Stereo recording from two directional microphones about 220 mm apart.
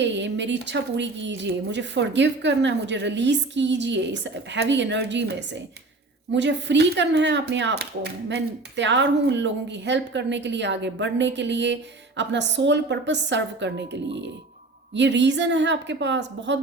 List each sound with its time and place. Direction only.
0.0 s a woman's voice: 55° right (ahead or behind)